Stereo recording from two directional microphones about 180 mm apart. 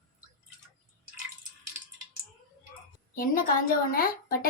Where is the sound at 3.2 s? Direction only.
50° left (ahead or behind).